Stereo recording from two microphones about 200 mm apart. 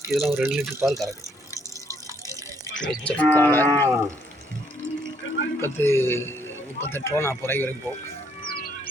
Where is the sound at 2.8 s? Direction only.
5° left (ahead or behind).